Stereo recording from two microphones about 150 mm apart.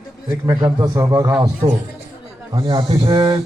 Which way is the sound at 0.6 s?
25° right (ahead or behind).